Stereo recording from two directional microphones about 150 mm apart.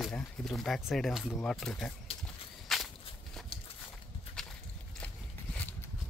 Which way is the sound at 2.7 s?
Centre (ahead or behind).